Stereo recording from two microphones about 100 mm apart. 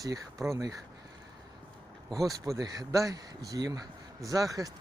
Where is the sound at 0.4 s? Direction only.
30° right (ahead or behind).